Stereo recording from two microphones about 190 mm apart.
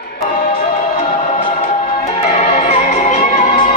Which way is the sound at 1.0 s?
30° left (ahead or behind).